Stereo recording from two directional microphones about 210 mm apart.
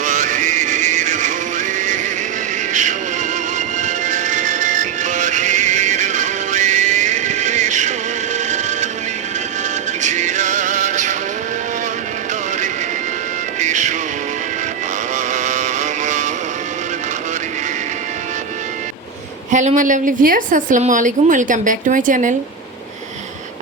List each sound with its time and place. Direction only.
0.0 s music: 35° right (ahead or behind)
3.8 s music: 35° right (ahead or behind)
10.0 s music: 35° right (ahead or behind)
13.6 s music: 35° right (ahead or behind)
15.1 s vehicle: 35° right (ahead or behind)
19.5 s a woman's voice: 35° right (ahead or behind)